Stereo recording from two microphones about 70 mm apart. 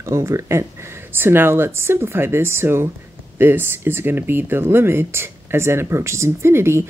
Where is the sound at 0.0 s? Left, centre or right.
Right.